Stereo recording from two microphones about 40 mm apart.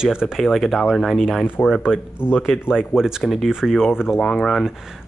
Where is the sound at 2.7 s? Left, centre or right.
Centre.